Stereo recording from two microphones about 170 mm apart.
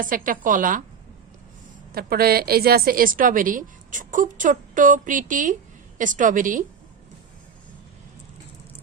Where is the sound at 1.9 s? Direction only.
65° right (ahead or behind).